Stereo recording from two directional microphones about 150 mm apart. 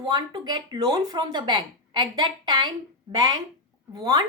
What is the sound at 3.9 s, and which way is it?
Speech, 25° right (ahead or behind).